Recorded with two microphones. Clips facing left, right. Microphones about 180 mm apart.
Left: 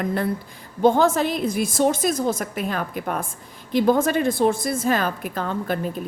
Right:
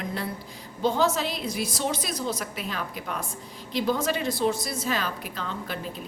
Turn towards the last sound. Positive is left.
turn(degrees=50)  # may be behind; listen again after turning